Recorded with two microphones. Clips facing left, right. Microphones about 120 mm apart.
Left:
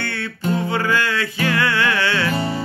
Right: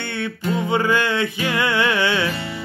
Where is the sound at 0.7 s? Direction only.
20° right (ahead or behind).